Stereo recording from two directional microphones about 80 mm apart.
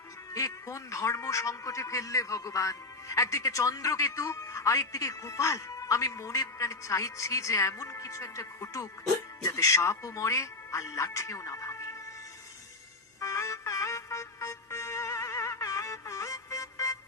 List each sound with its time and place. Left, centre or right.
0.3 s a man's voice: left
13.1 s music: left